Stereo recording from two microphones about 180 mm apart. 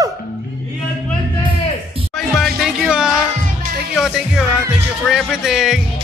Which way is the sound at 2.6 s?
5° right (ahead or behind).